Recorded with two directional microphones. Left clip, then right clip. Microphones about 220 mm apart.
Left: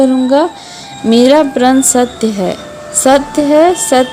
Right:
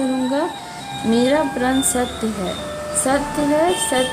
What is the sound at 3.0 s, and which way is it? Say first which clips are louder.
Speech: left 11 dB; 35° left (ahead or behind).